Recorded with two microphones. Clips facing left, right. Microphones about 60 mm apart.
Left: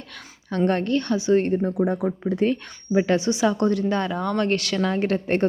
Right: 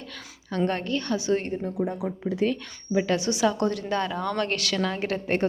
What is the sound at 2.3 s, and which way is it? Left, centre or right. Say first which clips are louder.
Speech: left 3 dB; left.